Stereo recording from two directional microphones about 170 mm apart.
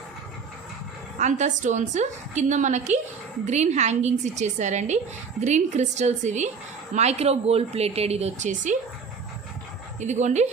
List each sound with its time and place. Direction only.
1.2 s a woman's voice: 45° right (ahead or behind)
10.0 s a woman's voice: 45° right (ahead or behind)